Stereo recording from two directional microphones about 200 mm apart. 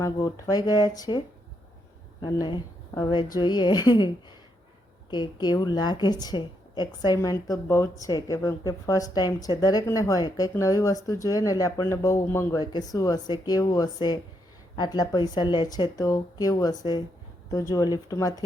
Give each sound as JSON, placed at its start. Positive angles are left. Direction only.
{"t": 0.0, "sound": "a woman's voice", "side_deg": 15}
{"t": 2.2, "sound": "a woman's voice", "side_deg": 20}